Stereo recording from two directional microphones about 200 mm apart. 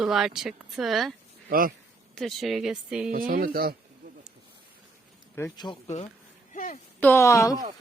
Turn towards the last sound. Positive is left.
turn(degrees=15)  # may be behind; listen again after turning